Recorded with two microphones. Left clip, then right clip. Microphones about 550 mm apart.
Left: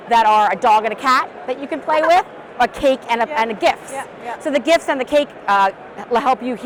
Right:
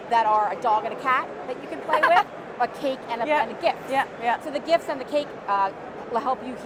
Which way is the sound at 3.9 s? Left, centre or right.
Right.